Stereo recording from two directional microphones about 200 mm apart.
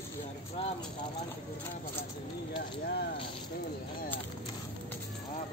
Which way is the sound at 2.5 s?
50° left (ahead or behind).